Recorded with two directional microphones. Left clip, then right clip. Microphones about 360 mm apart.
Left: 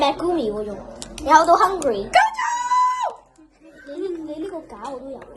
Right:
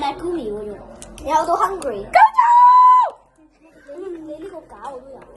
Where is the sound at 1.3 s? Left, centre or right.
Left.